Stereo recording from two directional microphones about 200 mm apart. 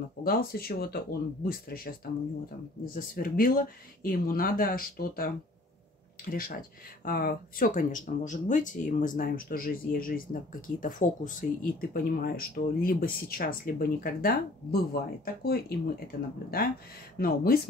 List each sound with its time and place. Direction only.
0.2 s speech: 50° left (ahead or behind)